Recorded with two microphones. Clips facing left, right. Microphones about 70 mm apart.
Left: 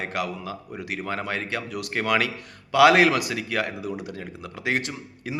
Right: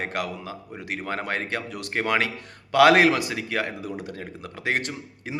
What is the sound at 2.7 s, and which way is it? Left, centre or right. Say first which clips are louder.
A man's voice: even; right.